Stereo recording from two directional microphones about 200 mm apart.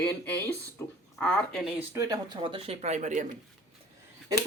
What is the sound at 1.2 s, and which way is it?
Speech, 5° left (ahead or behind).